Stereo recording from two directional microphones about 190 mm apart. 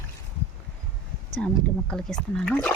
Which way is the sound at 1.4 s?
5° left (ahead or behind).